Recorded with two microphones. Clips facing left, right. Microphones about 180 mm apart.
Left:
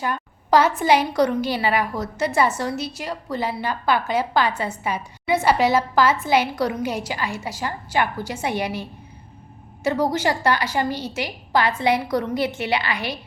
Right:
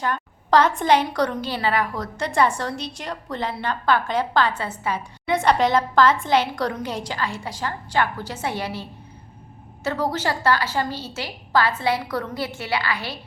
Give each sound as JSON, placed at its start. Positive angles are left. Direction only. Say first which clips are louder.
{"t": 0.0, "sound": "a woman's voice", "louder": "even", "side_deg": 10}